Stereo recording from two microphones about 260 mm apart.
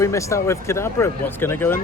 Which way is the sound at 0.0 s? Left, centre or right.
Centre.